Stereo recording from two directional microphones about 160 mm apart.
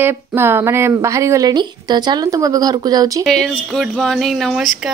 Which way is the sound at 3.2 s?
5° left (ahead or behind).